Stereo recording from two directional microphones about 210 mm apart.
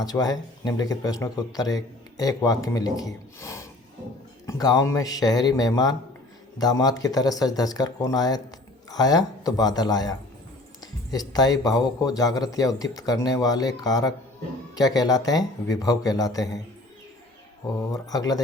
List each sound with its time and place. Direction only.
0.0 s speech: 20° left (ahead or behind)
17.9 s speech: 15° left (ahead or behind)